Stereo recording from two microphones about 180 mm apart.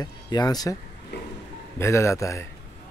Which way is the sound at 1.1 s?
70° left (ahead or behind).